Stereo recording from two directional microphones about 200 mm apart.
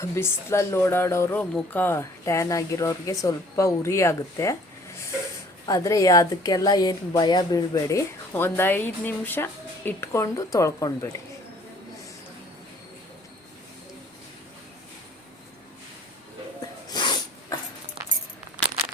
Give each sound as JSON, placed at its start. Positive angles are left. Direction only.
{"t": 0.0, "sound": "a woman's voice", "side_deg": 15}
{"t": 5.6, "sound": "a woman's voice", "side_deg": 15}
{"t": 16.6, "sound": "snort", "side_deg": 20}